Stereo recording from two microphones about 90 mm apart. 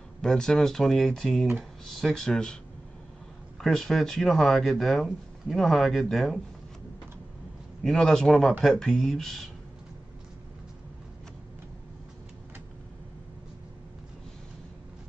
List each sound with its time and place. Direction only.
0.2 s speech: 5° left (ahead or behind)
3.6 s speech: 5° left (ahead or behind)
7.8 s speech: 5° left (ahead or behind)